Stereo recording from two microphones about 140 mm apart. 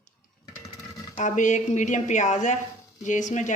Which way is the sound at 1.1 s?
65° left (ahead or behind).